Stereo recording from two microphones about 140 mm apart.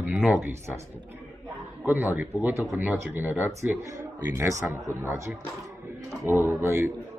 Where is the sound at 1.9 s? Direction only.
15° right (ahead or behind).